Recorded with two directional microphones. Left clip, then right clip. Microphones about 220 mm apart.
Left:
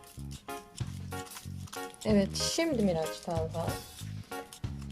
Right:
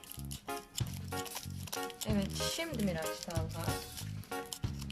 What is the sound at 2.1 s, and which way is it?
Speech, 25° left (ahead or behind).